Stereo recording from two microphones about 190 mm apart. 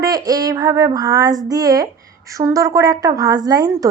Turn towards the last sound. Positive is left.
turn(degrees=-20)  # may be behind; listen again after turning